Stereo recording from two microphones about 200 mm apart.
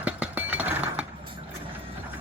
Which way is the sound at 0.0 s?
5° right (ahead or behind).